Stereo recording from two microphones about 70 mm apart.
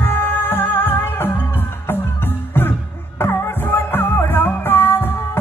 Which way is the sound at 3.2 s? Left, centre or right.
Left.